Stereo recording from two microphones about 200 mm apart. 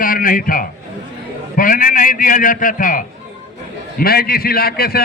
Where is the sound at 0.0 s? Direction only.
45° left (ahead or behind).